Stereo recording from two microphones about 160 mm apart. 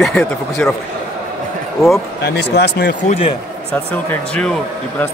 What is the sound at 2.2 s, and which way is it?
Speech, 90° left.